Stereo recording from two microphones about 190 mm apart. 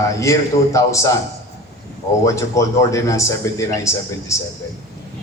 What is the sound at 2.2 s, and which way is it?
Speech, 15° left (ahead or behind).